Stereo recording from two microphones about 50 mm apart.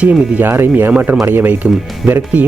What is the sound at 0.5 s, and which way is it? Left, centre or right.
Speech, right.